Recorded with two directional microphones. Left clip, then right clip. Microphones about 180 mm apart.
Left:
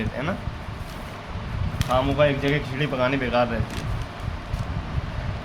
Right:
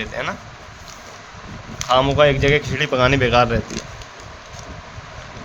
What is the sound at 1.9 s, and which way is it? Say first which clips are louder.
Speech: right 6 dB; 75° right (ahead or behind).